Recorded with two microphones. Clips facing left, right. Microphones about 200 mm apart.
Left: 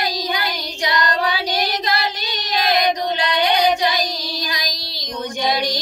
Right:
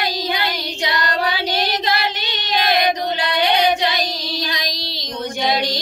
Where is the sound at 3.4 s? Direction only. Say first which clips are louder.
Even; 25° right (ahead or behind).